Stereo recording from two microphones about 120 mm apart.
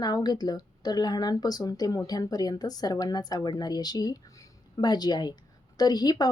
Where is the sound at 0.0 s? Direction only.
35° left (ahead or behind).